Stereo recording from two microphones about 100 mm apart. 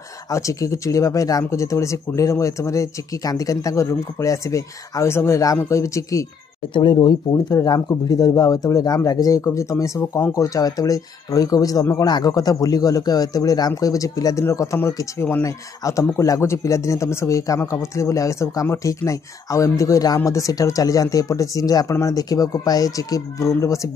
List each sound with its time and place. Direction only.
0.3 s speech: 30° left (ahead or behind)
6.7 s speech: 50° left (ahead or behind)
7.5 s speech: 35° left (ahead or behind)